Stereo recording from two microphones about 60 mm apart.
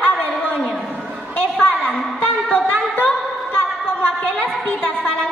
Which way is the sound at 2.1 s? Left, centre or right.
Left.